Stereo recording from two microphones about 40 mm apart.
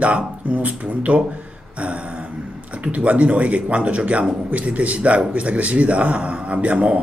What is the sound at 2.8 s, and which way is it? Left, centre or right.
Speech, right.